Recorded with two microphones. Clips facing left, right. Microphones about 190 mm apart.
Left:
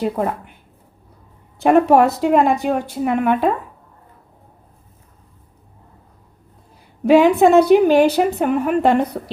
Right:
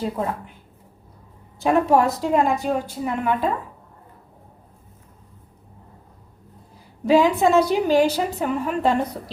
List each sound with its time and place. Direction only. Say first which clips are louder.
0.0 s a woman's voice: left 5 dB; 65° left (ahead or behind)
1.6 s a woman's voice: left 5 dB; 65° left (ahead or behind)
7.0 s a woman's voice: left 5 dB; 65° left (ahead or behind)